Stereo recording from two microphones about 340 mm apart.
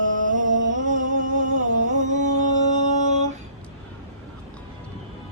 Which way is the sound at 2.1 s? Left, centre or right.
Right.